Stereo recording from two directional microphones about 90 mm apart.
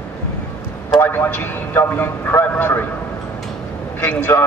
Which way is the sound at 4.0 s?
25° left (ahead or behind).